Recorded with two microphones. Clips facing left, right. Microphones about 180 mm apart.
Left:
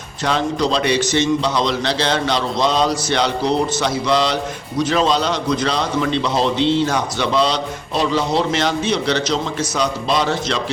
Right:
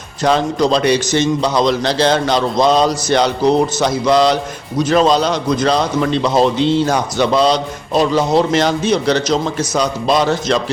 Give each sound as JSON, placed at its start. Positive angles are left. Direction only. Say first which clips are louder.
{"t": 0.2, "sound": "a man's voice", "louder": "right 5 dB", "side_deg": -40}